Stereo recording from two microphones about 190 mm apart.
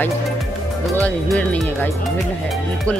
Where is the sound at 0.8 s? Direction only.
5° left (ahead or behind).